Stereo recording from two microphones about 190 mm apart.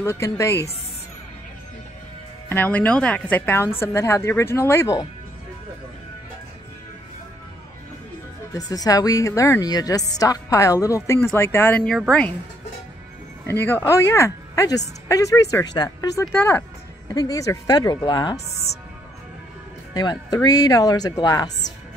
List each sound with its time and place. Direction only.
0.0 s speech: 15° left (ahead or behind)
2.5 s speech: 10° left (ahead or behind)
8.5 s speech: 20° left (ahead or behind)
13.5 s speech: 10° left (ahead or behind)
19.9 s speech: 20° left (ahead or behind)